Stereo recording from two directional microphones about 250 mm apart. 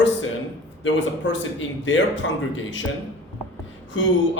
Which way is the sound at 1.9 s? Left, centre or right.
Left.